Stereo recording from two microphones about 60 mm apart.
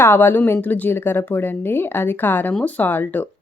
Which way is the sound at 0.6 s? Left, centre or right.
Left.